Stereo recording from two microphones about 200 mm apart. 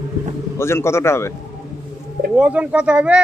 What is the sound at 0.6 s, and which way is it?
Speech, 15° left (ahead or behind).